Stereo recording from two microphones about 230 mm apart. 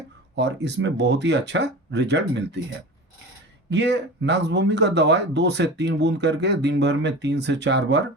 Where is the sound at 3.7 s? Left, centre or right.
Right.